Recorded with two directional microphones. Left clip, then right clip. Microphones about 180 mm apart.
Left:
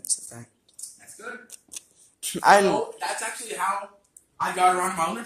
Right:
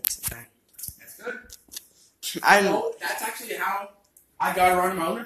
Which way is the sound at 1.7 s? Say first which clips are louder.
Right 1 dB; 45° left (ahead or behind).